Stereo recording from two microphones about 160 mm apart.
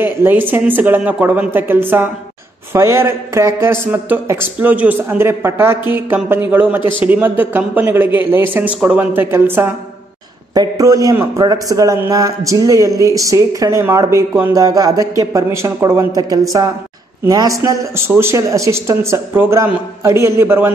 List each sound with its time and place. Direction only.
0.0 s a man's voice: 15° right (ahead or behind)